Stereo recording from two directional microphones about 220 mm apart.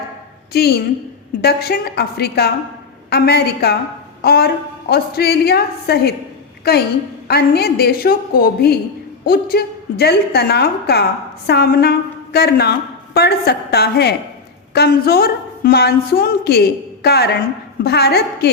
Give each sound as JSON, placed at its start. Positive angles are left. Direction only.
{"t": 0.5, "sound": "a woman's voice", "side_deg": 45}
{"t": 7.3, "sound": "a woman's voice", "side_deg": 45}